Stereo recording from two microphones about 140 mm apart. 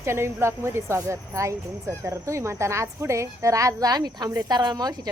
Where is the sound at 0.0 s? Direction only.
20° right (ahead or behind).